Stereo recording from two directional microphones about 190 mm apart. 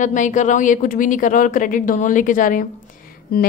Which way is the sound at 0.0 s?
40° left (ahead or behind).